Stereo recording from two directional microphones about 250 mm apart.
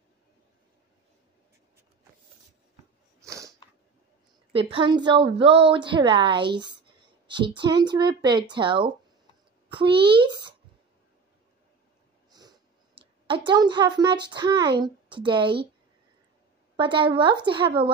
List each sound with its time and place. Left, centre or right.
3.3 s a sound: centre
4.5 s a woman's voice: right
12.3 s speech: centre
16.7 s a woman's voice: centre